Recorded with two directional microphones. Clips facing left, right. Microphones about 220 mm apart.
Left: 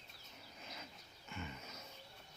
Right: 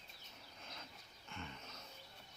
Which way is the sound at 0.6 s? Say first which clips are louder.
Left 2 dB; 5° left (ahead or behind).